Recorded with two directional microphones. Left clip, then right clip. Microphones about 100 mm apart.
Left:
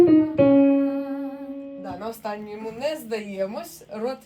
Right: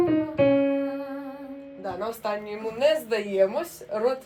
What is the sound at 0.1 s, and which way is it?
Music, 40° left (ahead or behind).